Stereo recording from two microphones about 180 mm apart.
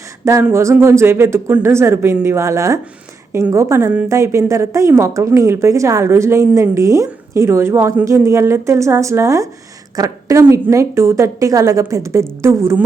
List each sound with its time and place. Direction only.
0.3 s a woman's voice: 15° right (ahead or behind)